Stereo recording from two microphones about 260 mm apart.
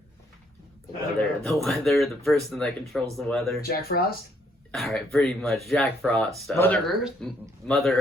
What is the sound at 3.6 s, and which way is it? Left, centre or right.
Speech, left.